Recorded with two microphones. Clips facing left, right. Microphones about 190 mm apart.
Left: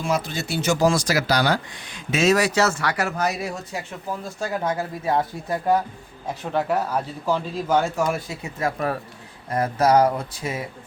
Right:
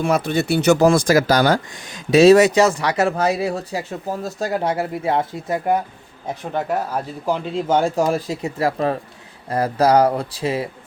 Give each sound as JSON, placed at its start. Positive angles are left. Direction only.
{"t": 0.0, "sound": "speech", "side_deg": -60}
{"t": 2.0, "sound": "speech", "side_deg": -35}
{"t": 2.4, "sound": "speech", "side_deg": -15}
{"t": 7.3, "sound": "speech", "side_deg": -20}